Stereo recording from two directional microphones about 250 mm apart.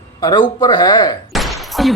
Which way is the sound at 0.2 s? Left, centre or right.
Centre.